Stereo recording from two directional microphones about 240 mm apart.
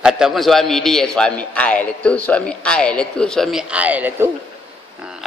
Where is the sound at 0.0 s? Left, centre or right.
Centre.